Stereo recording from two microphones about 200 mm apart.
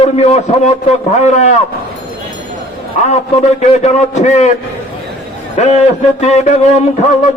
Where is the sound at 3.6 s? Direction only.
35° left (ahead or behind).